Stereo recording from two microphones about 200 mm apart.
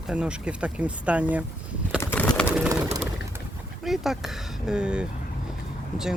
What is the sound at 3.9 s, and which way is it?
Speech, centre (ahead or behind).